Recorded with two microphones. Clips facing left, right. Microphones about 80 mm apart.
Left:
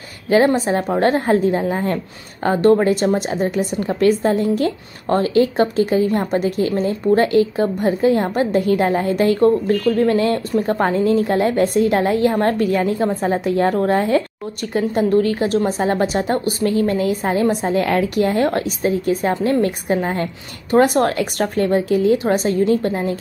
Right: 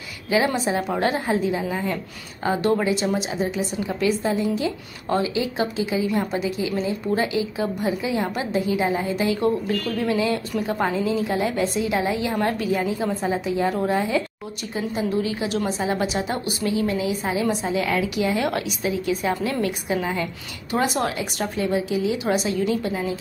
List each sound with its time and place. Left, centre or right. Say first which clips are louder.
0.6 s a woman's voice: left 5 dB; left